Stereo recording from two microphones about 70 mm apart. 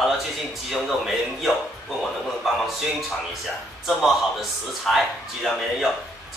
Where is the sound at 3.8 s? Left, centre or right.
Centre.